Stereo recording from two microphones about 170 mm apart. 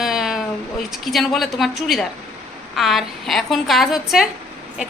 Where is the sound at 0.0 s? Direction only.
Centre (ahead or behind).